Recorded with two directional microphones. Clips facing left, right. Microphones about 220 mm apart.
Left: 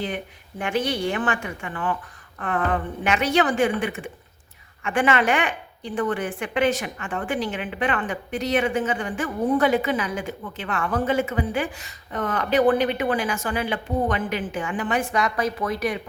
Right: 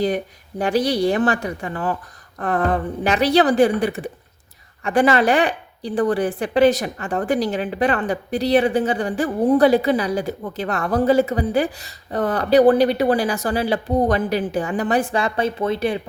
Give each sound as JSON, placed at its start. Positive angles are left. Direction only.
{"t": 0.6, "sound": "speech", "side_deg": -35}